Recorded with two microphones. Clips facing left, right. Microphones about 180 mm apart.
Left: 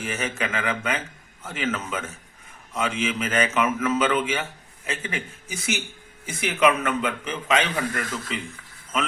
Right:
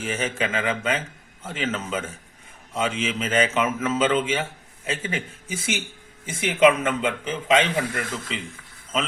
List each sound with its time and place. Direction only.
0.0 s a man's voice: 30° right (ahead or behind)